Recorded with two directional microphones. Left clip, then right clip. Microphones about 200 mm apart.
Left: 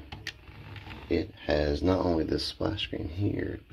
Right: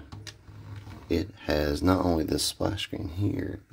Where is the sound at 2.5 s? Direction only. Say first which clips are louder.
Right 1 dB; 30° right (ahead or behind).